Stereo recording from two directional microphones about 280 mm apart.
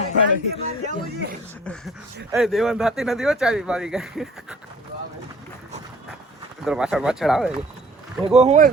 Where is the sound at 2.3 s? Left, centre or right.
Centre.